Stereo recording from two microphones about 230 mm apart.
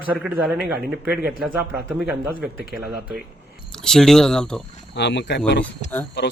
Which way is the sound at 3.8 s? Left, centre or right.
Centre.